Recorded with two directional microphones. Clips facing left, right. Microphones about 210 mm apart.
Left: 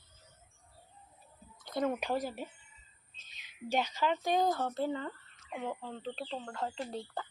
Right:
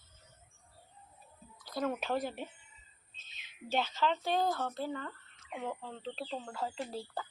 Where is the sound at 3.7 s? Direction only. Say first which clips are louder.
Left 1 dB; 15° left (ahead or behind).